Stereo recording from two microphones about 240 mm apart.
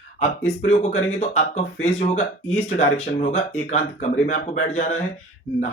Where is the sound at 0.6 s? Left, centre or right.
Left.